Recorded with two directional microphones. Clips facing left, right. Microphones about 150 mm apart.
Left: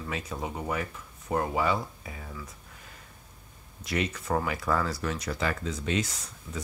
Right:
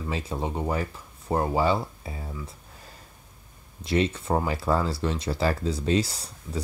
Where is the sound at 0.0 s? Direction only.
30° right (ahead or behind).